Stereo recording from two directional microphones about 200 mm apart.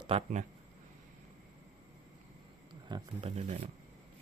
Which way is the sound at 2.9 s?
30° right (ahead or behind).